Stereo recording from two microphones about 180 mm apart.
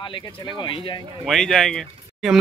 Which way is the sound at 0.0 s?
25° left (ahead or behind).